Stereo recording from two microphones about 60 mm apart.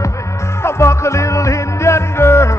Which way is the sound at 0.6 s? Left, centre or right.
Left.